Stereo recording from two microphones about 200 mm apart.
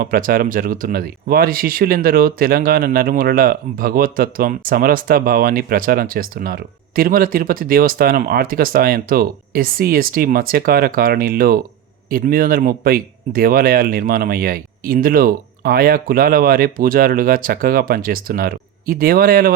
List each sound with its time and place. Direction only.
0.0 s speech: 45° right (ahead or behind)